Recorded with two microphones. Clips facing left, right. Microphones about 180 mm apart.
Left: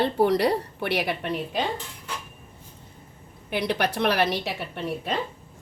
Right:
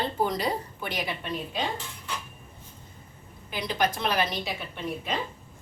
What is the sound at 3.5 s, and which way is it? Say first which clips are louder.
A woman's voice: left 3 dB; 70° left (ahead or behind).